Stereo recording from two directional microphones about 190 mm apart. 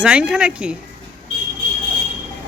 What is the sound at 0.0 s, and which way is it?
Speech, 5° right (ahead or behind).